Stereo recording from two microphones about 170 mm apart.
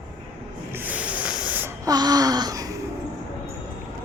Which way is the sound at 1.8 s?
25° right (ahead or behind).